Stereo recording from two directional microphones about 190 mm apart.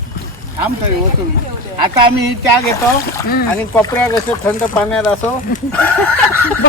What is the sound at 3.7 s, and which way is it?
Speech, 20° left (ahead or behind).